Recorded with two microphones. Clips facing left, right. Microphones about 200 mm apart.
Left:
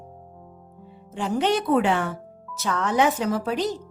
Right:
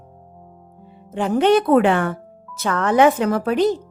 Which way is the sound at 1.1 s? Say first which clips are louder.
Right 7 dB; 60° right (ahead or behind).